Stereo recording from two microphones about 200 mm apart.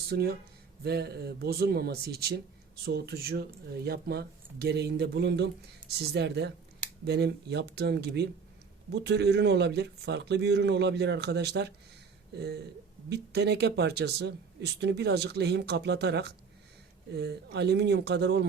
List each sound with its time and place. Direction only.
0.1 s speech: 50° right (ahead or behind)